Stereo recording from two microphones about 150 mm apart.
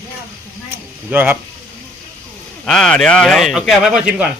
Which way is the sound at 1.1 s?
10° right (ahead or behind).